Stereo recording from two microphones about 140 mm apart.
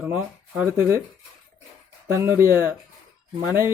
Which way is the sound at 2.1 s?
20° right (ahead or behind).